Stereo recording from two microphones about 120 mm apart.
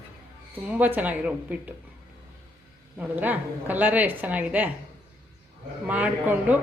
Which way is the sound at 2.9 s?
15° right (ahead or behind).